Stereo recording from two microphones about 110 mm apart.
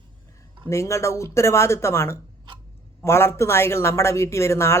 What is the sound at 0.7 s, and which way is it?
Speech, 25° left (ahead or behind).